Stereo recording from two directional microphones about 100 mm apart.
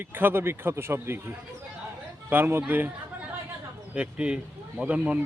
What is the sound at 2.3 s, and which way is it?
Speech, 20° right (ahead or behind).